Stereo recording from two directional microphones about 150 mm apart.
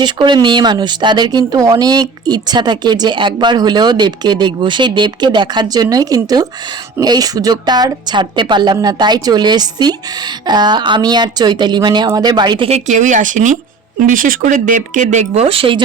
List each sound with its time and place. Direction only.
0.0 s speech: 30° right (ahead or behind)
12.6 s speech: 50° right (ahead or behind)